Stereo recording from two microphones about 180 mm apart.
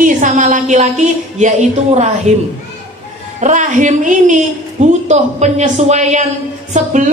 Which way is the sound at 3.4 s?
45° right (ahead or behind).